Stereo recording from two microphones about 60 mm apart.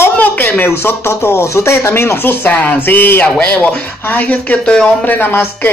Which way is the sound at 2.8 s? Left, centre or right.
Left.